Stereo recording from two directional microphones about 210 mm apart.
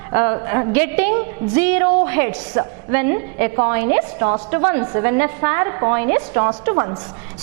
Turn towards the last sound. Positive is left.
turn(degrees=-20)  # may be behind; listen again after turning